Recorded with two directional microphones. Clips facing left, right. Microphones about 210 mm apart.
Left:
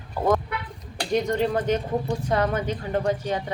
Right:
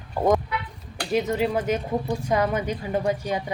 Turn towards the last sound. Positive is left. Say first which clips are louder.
# even
turn(degrees=-10)  # may be behind; listen again after turning